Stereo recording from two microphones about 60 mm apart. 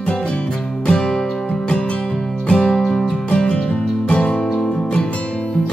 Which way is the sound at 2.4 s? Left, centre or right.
Centre.